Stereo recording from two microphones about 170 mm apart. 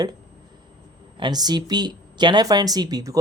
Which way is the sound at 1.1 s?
25° right (ahead or behind).